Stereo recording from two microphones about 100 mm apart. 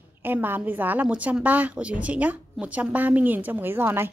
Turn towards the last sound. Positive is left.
turn(degrees=-25)  # may be behind; listen again after turning